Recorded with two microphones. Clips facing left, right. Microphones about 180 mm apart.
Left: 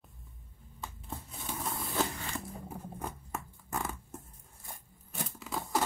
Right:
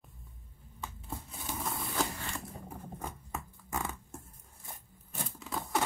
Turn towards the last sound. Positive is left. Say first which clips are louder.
# left 1 dB
turn(degrees=0)  # may be behind; listen again after turning